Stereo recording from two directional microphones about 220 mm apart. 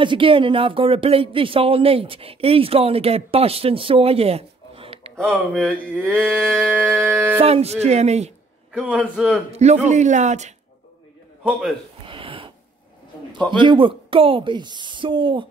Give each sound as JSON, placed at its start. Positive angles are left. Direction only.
{"t": 0.0, "sound": "speech", "side_deg": -25}
{"t": 5.1, "sound": "a man's voice", "side_deg": 5}
{"t": 6.2, "sound": "music", "side_deg": -5}
{"t": 7.3, "sound": "speech", "side_deg": -25}
{"t": 8.7, "sound": "a man's voice", "side_deg": -5}
{"t": 9.5, "sound": "speech", "side_deg": -30}
{"t": 12.1, "sound": "a sound", "side_deg": -25}
{"t": 13.5, "sound": "speech", "side_deg": -20}